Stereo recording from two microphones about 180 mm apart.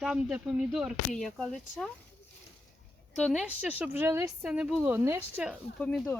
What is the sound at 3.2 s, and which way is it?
Speech, 5° left (ahead or behind).